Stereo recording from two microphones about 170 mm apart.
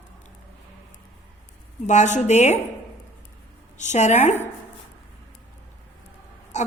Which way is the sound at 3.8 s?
45° left (ahead or behind).